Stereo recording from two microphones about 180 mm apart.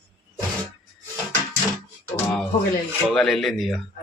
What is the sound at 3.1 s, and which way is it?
Speech, centre (ahead or behind).